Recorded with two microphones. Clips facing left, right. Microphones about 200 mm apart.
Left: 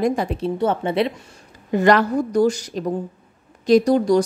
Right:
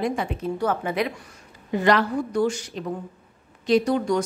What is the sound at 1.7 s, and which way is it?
A woman's voice, 45° left (ahead or behind).